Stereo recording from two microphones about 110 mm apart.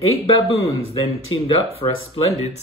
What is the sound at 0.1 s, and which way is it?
Speech, 65° left (ahead or behind).